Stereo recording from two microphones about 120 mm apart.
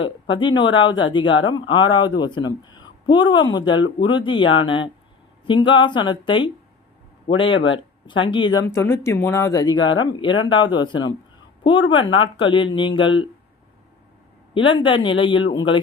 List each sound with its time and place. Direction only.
0.3 s speech: 40° left (ahead or behind)
8.6 s speech: 20° left (ahead or behind); by 13.2 s 45° left (ahead or behind)
14.5 s speech: 45° left (ahead or behind)